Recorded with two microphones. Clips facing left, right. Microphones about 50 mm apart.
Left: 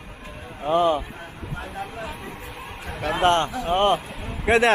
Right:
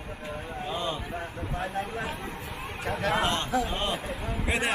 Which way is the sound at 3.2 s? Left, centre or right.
Left.